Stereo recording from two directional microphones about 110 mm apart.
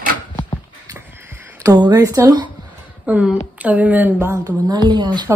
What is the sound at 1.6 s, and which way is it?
Speech, 35° right (ahead or behind).